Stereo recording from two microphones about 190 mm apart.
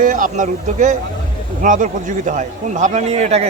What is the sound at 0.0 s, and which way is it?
Speech, 45° right (ahead or behind).